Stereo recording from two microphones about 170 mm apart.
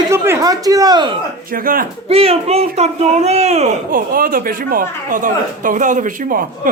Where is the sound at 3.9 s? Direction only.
55° right (ahead or behind).